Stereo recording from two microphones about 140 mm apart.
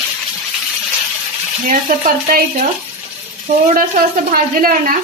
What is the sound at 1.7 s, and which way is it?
Stir, 85° right.